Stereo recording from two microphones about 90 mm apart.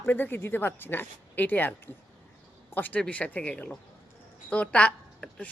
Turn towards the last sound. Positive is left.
turn(degrees=15)  # may be behind; listen again after turning